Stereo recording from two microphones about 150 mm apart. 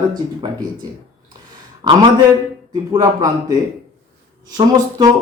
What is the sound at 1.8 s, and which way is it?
A man's voice, 25° right (ahead or behind).